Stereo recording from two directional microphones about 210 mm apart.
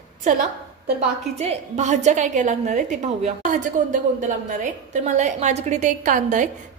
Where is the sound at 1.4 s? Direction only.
30° right (ahead or behind).